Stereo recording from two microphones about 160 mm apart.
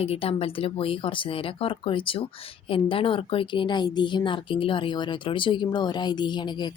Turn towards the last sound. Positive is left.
turn(degrees=25)  # may be behind; listen again after turning